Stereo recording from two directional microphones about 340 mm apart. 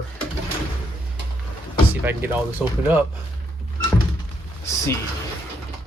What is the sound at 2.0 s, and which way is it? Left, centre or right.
Speech, centre.